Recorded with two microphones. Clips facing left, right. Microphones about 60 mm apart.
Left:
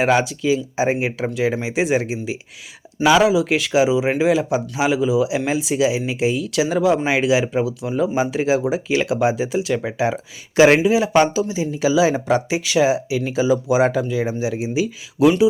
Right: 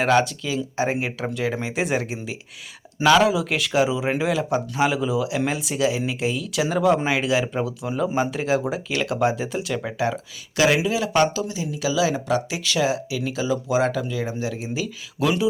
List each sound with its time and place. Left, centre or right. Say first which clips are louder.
0.0 s speech: left 2 dB; centre
11.6 s speech: left 5 dB; left